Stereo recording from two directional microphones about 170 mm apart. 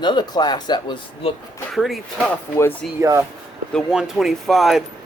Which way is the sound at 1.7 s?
Centre (ahead or behind).